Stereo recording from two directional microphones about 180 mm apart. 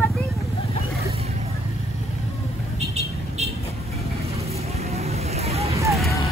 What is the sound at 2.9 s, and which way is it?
Vehicle, 35° right (ahead or behind).